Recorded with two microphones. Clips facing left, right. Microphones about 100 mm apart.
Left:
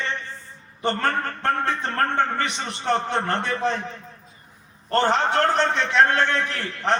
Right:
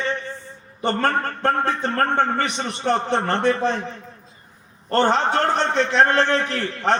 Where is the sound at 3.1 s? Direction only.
30° right (ahead or behind).